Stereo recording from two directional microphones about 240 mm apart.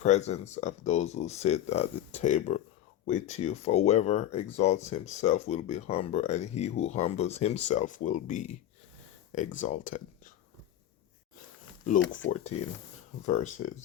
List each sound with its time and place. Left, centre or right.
0.0 s speech: left
9.6 s speech: left
11.9 s speech: left
12.5 s speech: left
13.2 s speech: left